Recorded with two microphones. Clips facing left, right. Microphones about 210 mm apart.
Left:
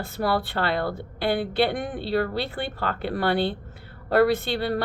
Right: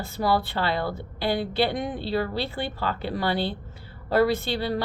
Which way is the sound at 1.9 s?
55° left (ahead or behind).